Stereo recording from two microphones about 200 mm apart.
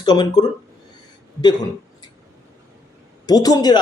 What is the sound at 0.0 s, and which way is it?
Speech, 20° left (ahead or behind).